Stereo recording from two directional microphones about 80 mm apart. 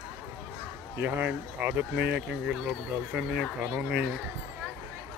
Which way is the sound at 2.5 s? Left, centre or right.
Centre.